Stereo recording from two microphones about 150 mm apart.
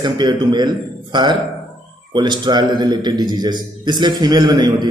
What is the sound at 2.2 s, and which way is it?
A man's voice, 30° right (ahead or behind).